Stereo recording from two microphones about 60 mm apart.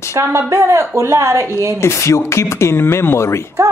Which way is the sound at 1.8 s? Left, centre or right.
Left.